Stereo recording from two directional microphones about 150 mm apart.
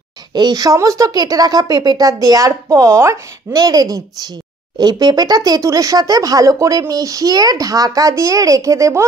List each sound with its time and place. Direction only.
0.3 s speech: 25° right (ahead or behind)